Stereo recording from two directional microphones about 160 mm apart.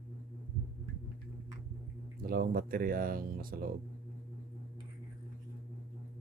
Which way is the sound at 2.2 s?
65° right (ahead or behind).